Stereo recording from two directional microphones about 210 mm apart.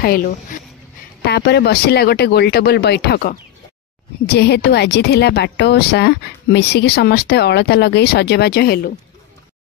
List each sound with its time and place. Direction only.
0.0 s a woman's voice: 45° left (ahead or behind)